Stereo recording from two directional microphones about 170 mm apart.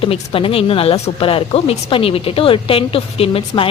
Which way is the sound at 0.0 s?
30° left (ahead or behind).